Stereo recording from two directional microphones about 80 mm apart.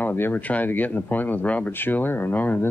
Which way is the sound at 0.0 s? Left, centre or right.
Left.